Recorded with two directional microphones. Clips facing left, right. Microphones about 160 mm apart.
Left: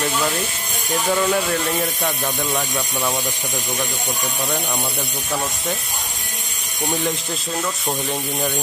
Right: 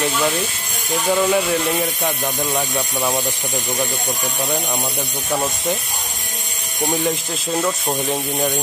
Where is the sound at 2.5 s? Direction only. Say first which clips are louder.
Right 2 dB; 20° right (ahead or behind).